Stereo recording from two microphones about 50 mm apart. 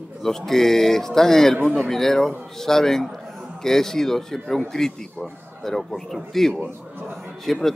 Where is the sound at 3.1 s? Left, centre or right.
Centre.